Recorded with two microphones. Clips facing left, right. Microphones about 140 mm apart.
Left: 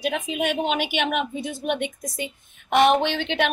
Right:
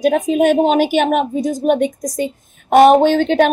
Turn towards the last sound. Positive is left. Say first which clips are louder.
# right 11 dB
turn(degrees=-40)  # may be behind; listen again after turning